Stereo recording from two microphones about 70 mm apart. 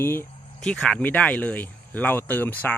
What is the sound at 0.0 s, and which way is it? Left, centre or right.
Speech, left.